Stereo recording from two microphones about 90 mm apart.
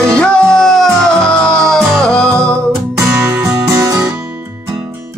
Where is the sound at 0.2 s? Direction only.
10° left (ahead or behind).